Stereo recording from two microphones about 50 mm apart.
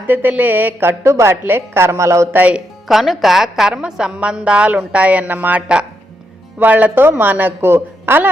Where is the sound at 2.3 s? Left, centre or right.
Right.